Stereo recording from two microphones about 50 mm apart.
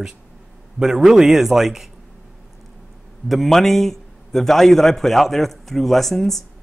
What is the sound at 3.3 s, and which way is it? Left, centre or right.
A man's voice, centre.